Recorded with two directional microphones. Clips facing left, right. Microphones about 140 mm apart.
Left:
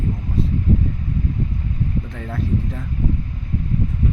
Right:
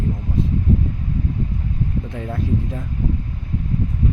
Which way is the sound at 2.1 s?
20° right (ahead or behind).